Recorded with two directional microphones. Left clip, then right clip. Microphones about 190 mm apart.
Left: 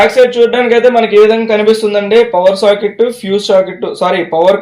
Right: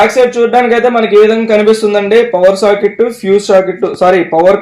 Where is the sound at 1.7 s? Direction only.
55° right (ahead or behind).